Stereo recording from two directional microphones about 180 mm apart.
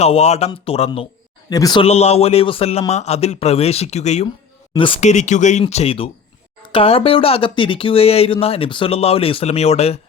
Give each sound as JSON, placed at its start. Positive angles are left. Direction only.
{"t": 0.0, "sound": "speech", "side_deg": 35}
{"t": 1.5, "sound": "speech", "side_deg": 20}